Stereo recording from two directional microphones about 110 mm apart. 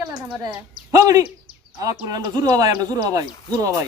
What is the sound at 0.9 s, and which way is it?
A woman's voice, 30° right (ahead or behind).